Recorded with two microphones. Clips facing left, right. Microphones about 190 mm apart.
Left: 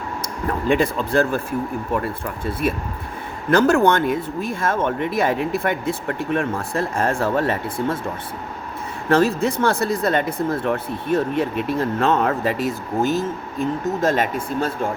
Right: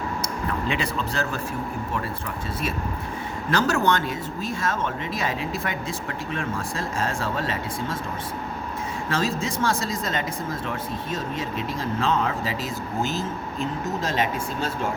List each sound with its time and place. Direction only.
0.2 s speech: 50° left (ahead or behind)
2.5 s speech: 55° left (ahead or behind)
9.0 s speech: 60° left (ahead or behind)